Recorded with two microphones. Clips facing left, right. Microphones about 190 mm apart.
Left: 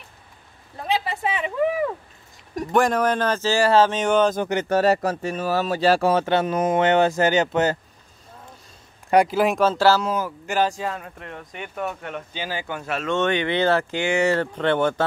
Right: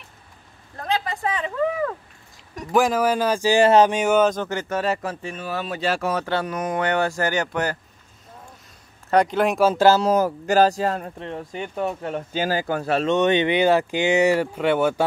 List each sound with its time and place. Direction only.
0.7 s a sound: 5° left (ahead or behind)
2.7 s speech: centre (ahead or behind)
4.4 s speech: 15° left (ahead or behind)
4.6 s speech: 40° left (ahead or behind); by 7.7 s 20° left (ahead or behind)
9.1 s speech: 5° left (ahead or behind)
9.6 s speech: 15° right (ahead or behind)
10.0 s speech: 40° right (ahead or behind)
13.1 s speech: 20° right (ahead or behind)